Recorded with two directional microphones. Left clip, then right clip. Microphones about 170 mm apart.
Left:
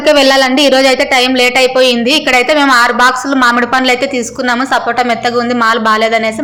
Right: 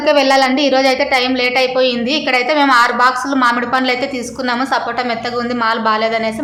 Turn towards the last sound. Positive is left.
turn(degrees=25)  # may be behind; listen again after turning